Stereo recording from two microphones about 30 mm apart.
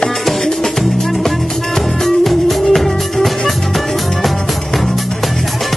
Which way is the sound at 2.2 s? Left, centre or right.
Centre.